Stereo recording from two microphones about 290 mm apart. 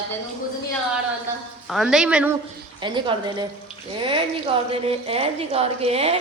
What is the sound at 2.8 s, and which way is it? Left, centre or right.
A woman's voice, centre.